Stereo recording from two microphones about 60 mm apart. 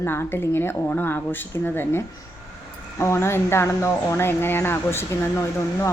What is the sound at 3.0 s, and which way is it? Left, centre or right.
A woman's voice, left.